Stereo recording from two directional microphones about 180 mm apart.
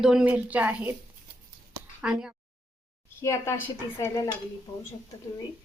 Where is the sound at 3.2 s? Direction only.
15° left (ahead or behind).